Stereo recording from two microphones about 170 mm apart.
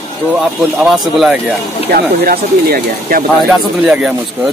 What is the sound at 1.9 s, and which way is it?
Speech, 65° right (ahead or behind).